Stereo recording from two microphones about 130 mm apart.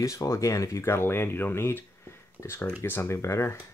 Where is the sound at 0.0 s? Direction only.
25° left (ahead or behind).